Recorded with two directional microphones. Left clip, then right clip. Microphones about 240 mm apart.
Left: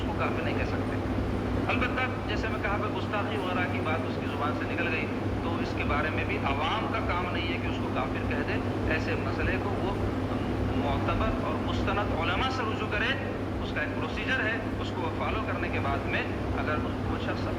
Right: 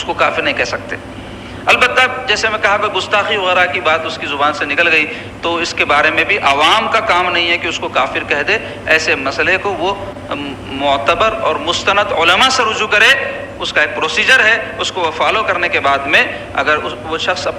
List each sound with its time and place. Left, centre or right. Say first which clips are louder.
0.2 s a man's voice: right 18 dB; right